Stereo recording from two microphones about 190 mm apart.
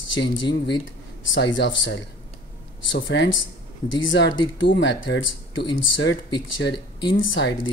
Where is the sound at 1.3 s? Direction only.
75° left (ahead or behind).